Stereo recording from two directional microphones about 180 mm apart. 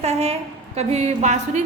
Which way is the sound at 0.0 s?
35° right (ahead or behind).